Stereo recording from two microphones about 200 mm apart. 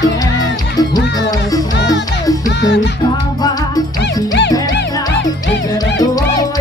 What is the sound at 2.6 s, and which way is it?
Music, 60° left (ahead or behind).